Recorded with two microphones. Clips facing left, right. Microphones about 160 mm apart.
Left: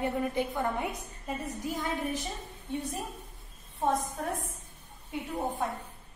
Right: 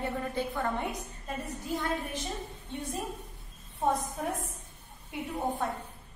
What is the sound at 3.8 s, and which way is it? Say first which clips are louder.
Speech: even; centre (ahead or behind).